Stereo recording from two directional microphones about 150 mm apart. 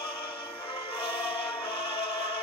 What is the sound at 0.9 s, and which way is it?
Choir, 35° left (ahead or behind).